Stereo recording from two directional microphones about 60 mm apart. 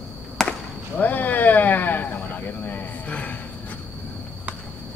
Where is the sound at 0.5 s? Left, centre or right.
Left.